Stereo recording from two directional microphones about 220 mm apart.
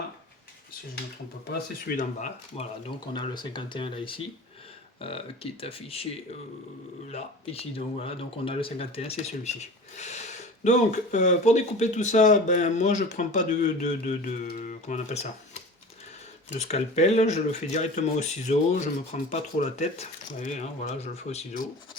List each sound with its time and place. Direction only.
2.0 s speech: 35° left (ahead or behind)
7.1 s speech: 30° left (ahead or behind)